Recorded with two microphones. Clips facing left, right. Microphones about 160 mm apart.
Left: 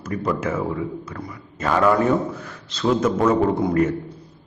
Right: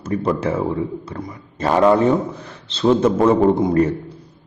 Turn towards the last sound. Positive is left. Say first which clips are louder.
# right 4 dB
turn(degrees=-30)  # may be behind; listen again after turning